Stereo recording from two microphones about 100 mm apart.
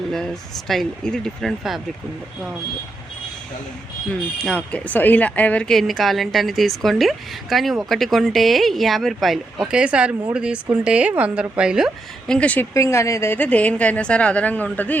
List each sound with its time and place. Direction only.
0.7 s speech: 5° left (ahead or behind)
4.4 s speech: 15° left (ahead or behind); by 11.9 s 10° right (ahead or behind)
12.3 s a woman's voice: 15° left (ahead or behind)
12.7 s a woman's voice: 30° left (ahead or behind)